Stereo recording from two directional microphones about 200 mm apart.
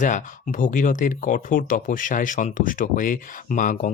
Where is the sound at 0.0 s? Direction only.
40° left (ahead or behind).